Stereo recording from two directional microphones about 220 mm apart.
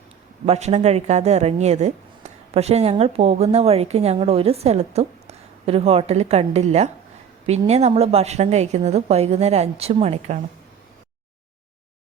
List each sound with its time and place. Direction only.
0.4 s speech: 30° right (ahead or behind)